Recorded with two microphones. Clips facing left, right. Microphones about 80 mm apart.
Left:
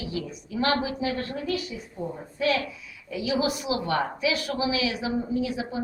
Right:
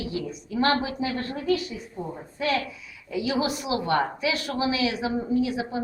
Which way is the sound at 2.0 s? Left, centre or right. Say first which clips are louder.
Left 1 dB; right.